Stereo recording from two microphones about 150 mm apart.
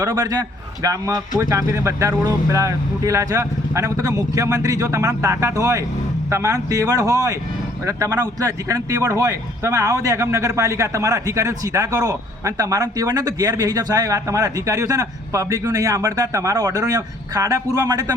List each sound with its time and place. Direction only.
0.0 s a man's voice: 25° right (ahead or behind)